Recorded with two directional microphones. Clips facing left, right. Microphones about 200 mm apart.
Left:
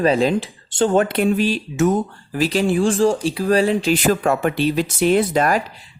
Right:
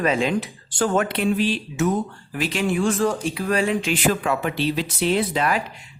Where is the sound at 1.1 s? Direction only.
45° left (ahead or behind).